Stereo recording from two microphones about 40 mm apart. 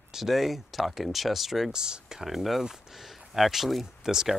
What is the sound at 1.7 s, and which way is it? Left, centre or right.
Speech, centre.